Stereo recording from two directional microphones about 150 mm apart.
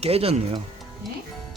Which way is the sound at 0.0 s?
40° right (ahead or behind).